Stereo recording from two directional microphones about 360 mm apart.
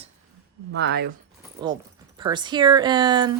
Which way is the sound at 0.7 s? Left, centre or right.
Right.